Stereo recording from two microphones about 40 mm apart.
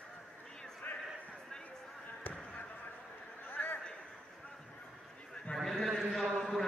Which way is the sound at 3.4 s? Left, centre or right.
Left.